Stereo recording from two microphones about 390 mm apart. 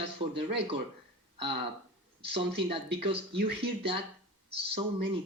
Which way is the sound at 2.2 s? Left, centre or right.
Centre.